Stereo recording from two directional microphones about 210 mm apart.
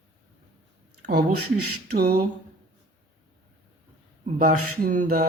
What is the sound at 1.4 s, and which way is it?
Speech, 90° right.